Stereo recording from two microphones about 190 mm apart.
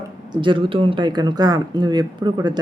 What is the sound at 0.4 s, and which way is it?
Speech, 25° right (ahead or behind).